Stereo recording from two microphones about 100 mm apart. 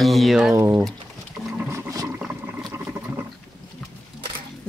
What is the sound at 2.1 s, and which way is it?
Boat, 15° right (ahead or behind).